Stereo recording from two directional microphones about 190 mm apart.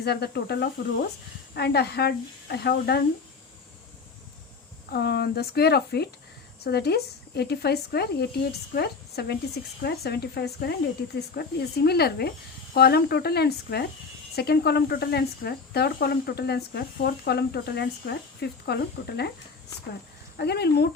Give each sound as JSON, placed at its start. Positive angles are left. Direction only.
{"t": 0.0, "sound": "speech", "side_deg": 60}
{"t": 4.9, "sound": "speech", "side_deg": 60}
{"t": 20.3, "sound": "speech", "side_deg": 60}